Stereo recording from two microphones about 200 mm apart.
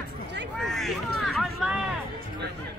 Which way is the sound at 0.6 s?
Centre (ahead or behind).